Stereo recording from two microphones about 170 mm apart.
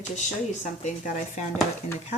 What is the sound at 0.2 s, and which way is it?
Speech, 45° left (ahead or behind).